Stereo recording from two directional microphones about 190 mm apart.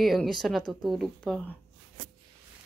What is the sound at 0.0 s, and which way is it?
Speech, centre (ahead or behind).